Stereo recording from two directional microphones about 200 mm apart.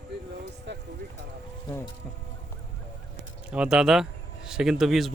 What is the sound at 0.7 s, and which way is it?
Speech, 60° right (ahead or behind).